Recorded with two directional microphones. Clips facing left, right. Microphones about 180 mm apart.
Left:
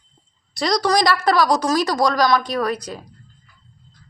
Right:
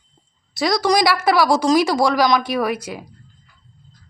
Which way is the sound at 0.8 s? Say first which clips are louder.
Right 1 dB; 10° right (ahead or behind).